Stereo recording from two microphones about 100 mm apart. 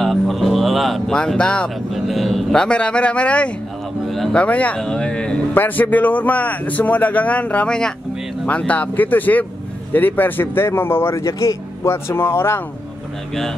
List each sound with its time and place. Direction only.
0.0 s music: centre (ahead or behind)
1.9 s speech: centre (ahead or behind)
4.4 s a man's voice: 15° left (ahead or behind)